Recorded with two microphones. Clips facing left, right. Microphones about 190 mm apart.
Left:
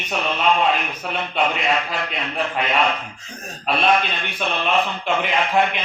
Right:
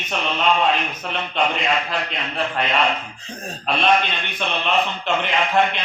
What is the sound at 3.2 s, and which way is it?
Speech, 30° right (ahead or behind).